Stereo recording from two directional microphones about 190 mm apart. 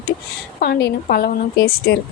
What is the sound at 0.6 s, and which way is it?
Speech, 60° left (ahead or behind).